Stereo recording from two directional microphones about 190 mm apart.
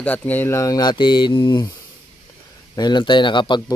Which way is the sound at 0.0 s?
10° left (ahead or behind).